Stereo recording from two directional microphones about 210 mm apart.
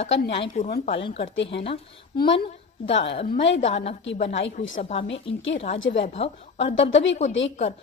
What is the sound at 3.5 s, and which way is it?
A woman's voice, 30° left (ahead or behind).